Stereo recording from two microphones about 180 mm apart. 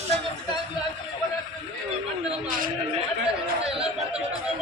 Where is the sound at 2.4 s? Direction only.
50° right (ahead or behind).